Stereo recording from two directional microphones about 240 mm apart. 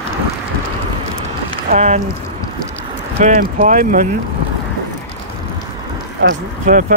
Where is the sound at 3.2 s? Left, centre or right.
Right.